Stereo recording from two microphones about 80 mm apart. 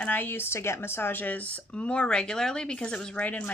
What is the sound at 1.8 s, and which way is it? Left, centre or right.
Speech, centre.